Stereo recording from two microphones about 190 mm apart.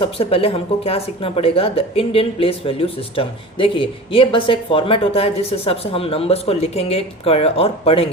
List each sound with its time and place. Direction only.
0.0 s speech: 30° left (ahead or behind)